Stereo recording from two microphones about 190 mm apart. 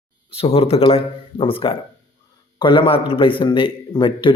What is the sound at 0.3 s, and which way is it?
A man's voice, 30° left (ahead or behind).